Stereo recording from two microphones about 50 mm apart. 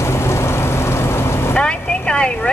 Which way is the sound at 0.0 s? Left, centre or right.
Left.